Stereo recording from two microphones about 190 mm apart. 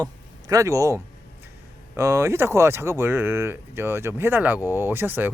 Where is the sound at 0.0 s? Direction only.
20° right (ahead or behind).